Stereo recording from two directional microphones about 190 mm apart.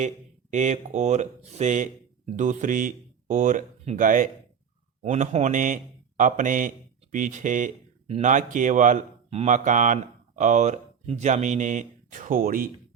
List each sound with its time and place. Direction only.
0.5 s speech: 35° right (ahead or behind)